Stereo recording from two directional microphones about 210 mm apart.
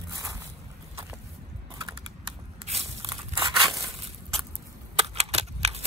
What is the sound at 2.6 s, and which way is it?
Crumpling, 25° right (ahead or behind).